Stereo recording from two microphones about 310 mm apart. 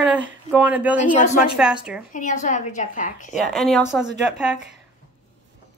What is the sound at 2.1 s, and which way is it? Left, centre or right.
A woman's voice, left.